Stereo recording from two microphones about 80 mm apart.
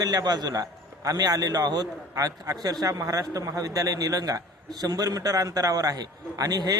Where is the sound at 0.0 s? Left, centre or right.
Right.